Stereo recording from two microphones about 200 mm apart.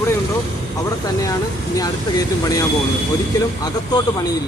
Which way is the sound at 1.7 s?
20° left (ahead or behind).